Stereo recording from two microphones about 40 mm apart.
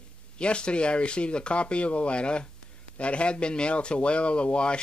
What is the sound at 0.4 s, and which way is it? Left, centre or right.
Speech, left.